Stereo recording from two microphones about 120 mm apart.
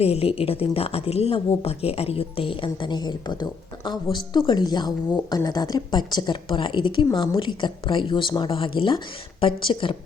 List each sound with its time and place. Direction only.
0.0 s a woman's voice: 55° left (ahead or behind)